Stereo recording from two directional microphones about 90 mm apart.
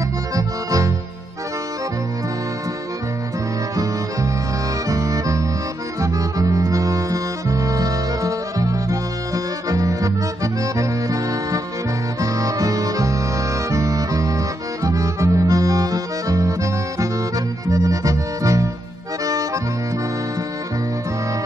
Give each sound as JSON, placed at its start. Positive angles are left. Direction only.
{"t": 0.4, "sound": "music", "side_deg": -40}
{"t": 4.8, "sound": "harmonica", "side_deg": -40}
{"t": 5.9, "sound": "accordion", "side_deg": -40}
{"t": 12.2, "sound": "harmonica", "side_deg": -40}
{"t": 13.7, "sound": "music", "side_deg": -35}
{"t": 17.6, "sound": "accordion", "side_deg": -40}